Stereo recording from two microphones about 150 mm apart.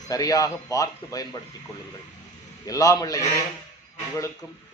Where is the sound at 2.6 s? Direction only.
25° left (ahead or behind).